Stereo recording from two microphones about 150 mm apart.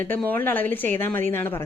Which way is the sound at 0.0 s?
10° left (ahead or behind).